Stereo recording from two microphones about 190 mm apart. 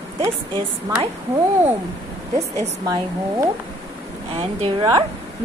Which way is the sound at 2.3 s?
35° right (ahead or behind).